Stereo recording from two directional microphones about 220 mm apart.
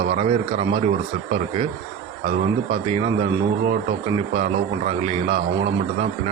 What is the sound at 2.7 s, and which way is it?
Speech, 25° right (ahead or behind).